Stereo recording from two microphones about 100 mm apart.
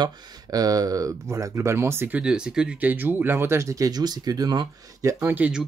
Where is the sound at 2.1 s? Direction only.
10° right (ahead or behind); by 5.1 s 40° right (ahead or behind).